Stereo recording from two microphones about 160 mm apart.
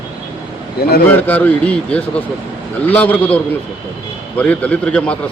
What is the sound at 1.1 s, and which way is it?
Speech, 10° left (ahead or behind).